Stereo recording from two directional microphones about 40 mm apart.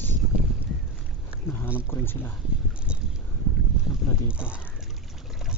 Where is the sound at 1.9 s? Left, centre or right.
Left.